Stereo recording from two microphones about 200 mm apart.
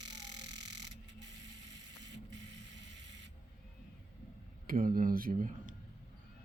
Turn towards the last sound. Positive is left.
turn(degrees=-40)  # may be behind; listen again after turning